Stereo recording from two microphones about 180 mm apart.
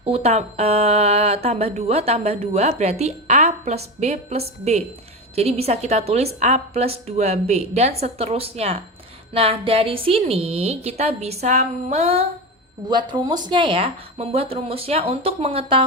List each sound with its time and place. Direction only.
0.0 s speech: 35° right (ahead or behind)
12.9 s speech: 25° right (ahead or behind)